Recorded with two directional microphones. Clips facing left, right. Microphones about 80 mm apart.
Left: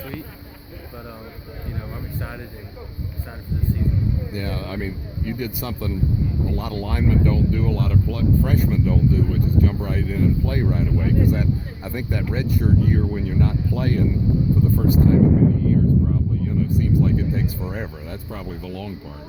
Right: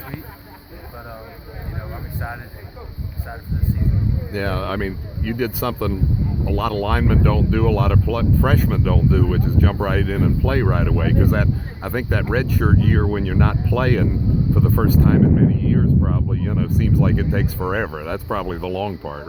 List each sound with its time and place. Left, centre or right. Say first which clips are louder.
4.3 s speech: right 6 dB; right
7.1 s speech: right 2 dB; right
11.2 s speech: right 2 dB; right
15.0 s speech: even; right